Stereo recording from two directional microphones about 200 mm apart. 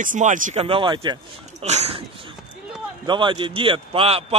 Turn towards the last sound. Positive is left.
turn(degrees=-30)  # may be behind; listen again after turning